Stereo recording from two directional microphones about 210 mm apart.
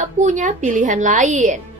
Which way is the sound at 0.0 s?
35° right (ahead or behind).